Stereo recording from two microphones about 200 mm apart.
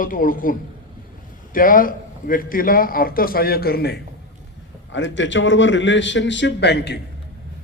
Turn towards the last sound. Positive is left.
turn(degrees=60)  # may be behind; listen again after turning